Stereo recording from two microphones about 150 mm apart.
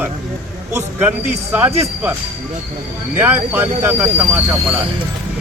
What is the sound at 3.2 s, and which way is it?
A man's voice, 15° right (ahead or behind).